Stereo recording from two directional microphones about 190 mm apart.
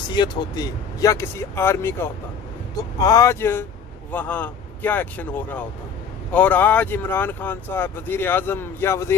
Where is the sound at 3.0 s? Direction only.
20° left (ahead or behind).